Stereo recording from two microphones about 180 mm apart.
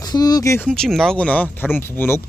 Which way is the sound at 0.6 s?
5° left (ahead or behind).